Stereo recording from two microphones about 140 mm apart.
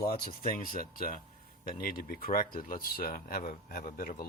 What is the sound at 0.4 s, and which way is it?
Speech, 90° left.